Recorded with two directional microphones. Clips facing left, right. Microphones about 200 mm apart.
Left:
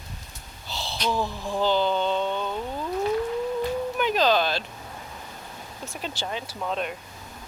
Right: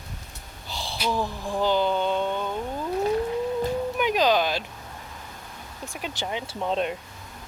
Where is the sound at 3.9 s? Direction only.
15° right (ahead or behind).